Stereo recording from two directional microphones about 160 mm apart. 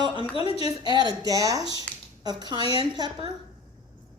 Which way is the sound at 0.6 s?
25° right (ahead or behind).